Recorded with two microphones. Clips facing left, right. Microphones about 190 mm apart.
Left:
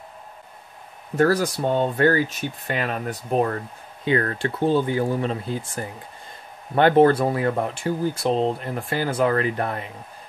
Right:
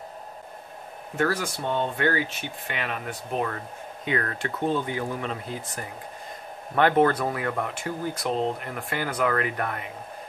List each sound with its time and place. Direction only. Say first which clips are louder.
1.1 s speech: left 7 dB; 40° left (ahead or behind)